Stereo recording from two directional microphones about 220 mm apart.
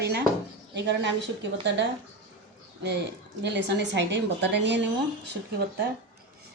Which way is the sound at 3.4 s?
50° right (ahead or behind).